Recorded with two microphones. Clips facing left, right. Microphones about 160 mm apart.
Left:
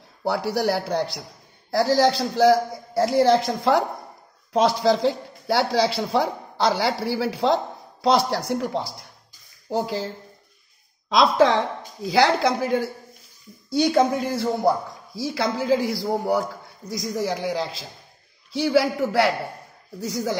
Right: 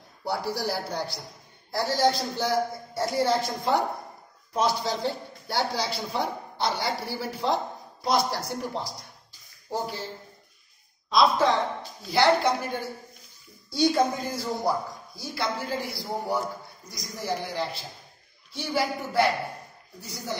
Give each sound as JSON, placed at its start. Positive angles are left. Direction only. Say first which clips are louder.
{"t": 0.2, "sound": "a man's voice", "louder": "left 6 dB", "side_deg": 75}
{"t": 1.7, "sound": "a man's voice", "louder": "left 5 dB", "side_deg": 90}
{"t": 11.1, "sound": "a man's voice", "louder": "left 4 dB", "side_deg": 85}
{"t": 13.7, "sound": "speech", "louder": "left 4 dB", "side_deg": 70}
{"t": 15.1, "sound": "a man's voice", "louder": "left 6 dB", "side_deg": 90}